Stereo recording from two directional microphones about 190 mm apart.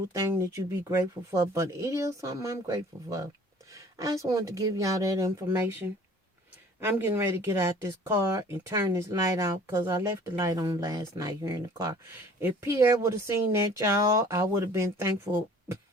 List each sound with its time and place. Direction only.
0.9 s speech: 15° right (ahead or behind)